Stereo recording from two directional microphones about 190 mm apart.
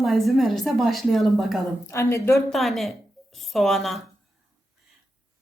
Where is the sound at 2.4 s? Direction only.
Centre (ahead or behind).